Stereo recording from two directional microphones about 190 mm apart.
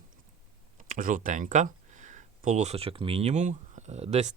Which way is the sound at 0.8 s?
45° right (ahead or behind).